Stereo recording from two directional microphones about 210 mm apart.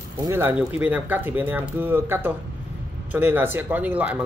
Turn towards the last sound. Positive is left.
turn(degrees=-5)  # may be behind; listen again after turning